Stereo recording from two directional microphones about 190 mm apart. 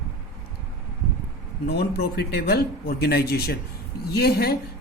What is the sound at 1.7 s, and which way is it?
A woman's voice, 60° left (ahead or behind).